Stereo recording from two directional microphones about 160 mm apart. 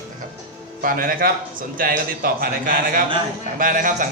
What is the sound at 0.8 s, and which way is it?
A man's voice, 60° right (ahead or behind).